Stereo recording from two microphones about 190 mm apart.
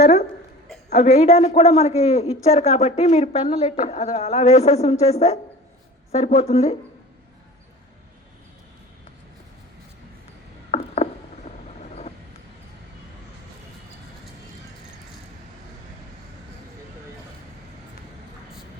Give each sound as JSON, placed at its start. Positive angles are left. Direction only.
{"t": 0.0, "sound": "speech", "side_deg": 60}
{"t": 0.9, "sound": "a man's voice", "side_deg": 35}
{"t": 10.7, "sound": "a sound", "side_deg": 35}